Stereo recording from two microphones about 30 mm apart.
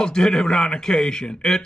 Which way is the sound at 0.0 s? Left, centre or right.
Left.